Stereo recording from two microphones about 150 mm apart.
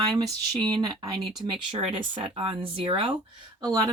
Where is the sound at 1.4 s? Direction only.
35° right (ahead or behind).